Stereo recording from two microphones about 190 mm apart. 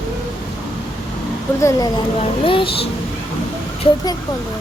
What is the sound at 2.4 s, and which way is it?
Speech, 30° left (ahead or behind).